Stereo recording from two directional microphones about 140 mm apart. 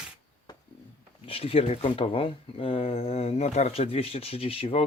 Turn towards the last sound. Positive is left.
turn(degrees=45)  # may be behind; listen again after turning